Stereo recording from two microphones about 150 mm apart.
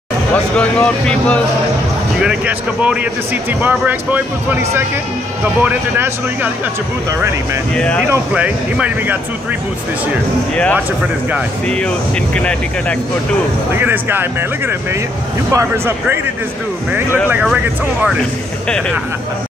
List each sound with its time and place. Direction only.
0.6 s speech: 10° left (ahead or behind)
2.2 s speech: 5° right (ahead or behind)
7.7 s speech: 5° left (ahead or behind)
8.1 s speech: 10° right (ahead or behind)
10.5 s speech: 5° left (ahead or behind)
13.7 s speech: 15° right (ahead or behind)
15.5 s speech: 15° right (ahead or behind)